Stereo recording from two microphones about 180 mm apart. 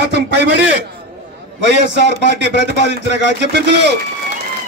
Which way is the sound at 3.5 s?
70° right (ahead or behind).